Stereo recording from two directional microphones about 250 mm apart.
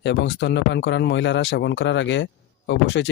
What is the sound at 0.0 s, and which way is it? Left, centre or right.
Speech, left.